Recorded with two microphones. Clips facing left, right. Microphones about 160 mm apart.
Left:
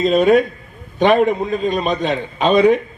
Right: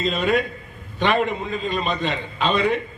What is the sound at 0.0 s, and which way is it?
A man's voice, 45° left (ahead or behind).